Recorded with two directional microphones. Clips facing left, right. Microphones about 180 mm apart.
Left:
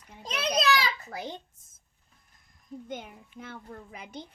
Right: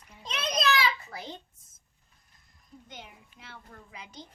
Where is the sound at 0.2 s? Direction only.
35° left (ahead or behind).